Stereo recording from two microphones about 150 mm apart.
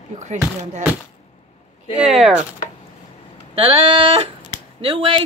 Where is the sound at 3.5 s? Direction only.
40° right (ahead or behind).